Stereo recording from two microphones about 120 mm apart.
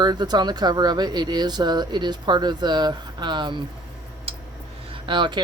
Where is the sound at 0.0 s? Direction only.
35° right (ahead or behind).